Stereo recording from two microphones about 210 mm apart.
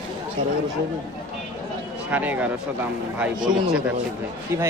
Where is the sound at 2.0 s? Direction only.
10° right (ahead or behind).